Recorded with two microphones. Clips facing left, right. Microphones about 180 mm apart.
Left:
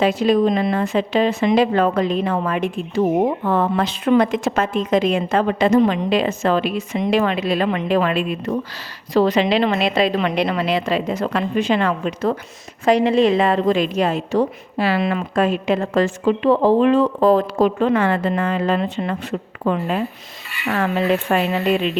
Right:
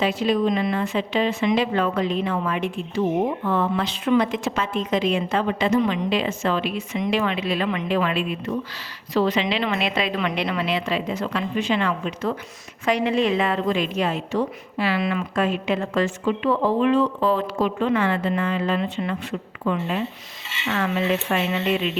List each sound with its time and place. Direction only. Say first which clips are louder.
0.0 s speech: left 5 dB; 45° left (ahead or behind)
12.8 s a woman's voice: left 6 dB; 35° left (ahead or behind)